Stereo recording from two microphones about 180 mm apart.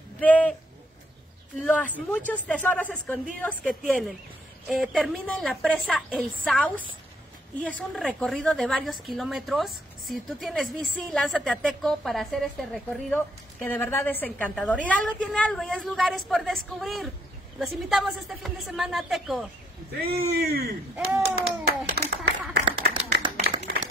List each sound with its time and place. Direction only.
0.2 s speech: 10° left (ahead or behind)
1.6 s a woman's voice: 5° left (ahead or behind)
13.1 s a woman's voice: 10° left (ahead or behind)
19.9 s speech: 60° right (ahead or behind)
21.4 s clapping: 65° right (ahead or behind)
23.0 s clapping: 40° right (ahead or behind)